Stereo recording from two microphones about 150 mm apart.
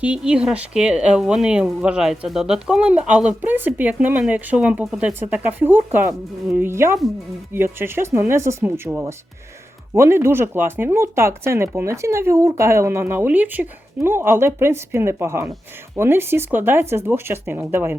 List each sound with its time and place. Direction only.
0.0 s speech: 5° right (ahead or behind)